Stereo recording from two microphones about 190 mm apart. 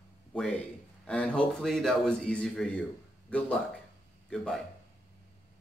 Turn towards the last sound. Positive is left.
turn(degrees=0)  # may be behind; listen again after turning